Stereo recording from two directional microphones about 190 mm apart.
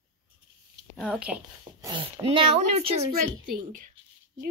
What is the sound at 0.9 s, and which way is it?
Speech, 5° right (ahead or behind).